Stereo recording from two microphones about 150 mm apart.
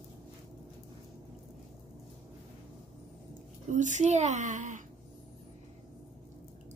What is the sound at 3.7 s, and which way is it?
A woman's voice, 55° right (ahead or behind).